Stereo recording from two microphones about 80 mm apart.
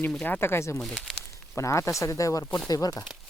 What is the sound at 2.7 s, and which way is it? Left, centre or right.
Speech, left.